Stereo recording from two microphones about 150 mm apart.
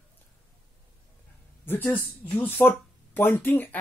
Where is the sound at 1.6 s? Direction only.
15° left (ahead or behind).